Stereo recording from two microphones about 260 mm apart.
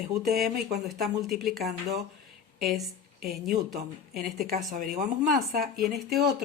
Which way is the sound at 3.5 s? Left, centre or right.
Right.